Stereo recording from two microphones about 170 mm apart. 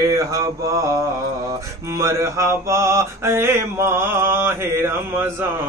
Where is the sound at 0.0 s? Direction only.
20° right (ahead or behind).